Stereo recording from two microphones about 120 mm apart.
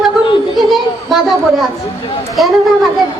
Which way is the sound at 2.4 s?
Centre (ahead or behind).